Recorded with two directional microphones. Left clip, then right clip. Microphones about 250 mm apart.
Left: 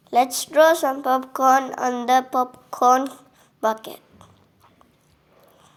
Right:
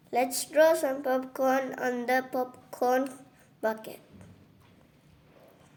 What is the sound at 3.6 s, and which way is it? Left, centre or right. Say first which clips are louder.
Speech: left 8 dB; centre.